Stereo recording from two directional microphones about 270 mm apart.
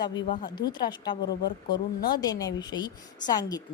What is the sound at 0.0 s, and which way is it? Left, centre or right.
Speech, centre.